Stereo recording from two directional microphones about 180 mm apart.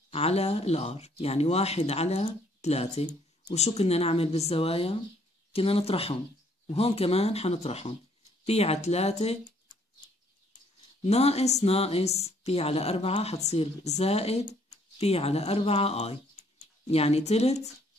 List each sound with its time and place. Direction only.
0.1 s speech: 35° left (ahead or behind)
11.1 s speech: 35° left (ahead or behind)